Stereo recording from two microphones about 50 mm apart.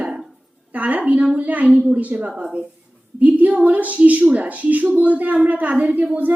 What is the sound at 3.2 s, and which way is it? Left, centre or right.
A woman's voice, right.